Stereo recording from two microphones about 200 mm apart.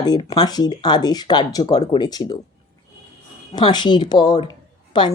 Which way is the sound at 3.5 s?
20° left (ahead or behind).